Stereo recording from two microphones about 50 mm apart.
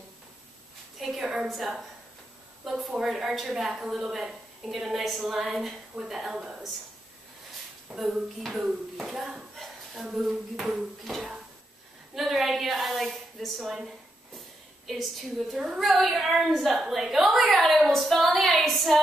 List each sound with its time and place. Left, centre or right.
0.9 s a sound: centre
1.2 s a woman's voice: centre
1.5 s a woman's voice: centre
7.9 s a woman's voice: centre
9.9 s a woman's voice: centre
14.9 s a woman's voice: centre
15.5 s a woman's voice: centre
15.8 s a woman's voice: centre